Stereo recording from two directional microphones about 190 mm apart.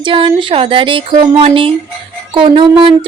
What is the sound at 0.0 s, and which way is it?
Speech, 25° right (ahead or behind).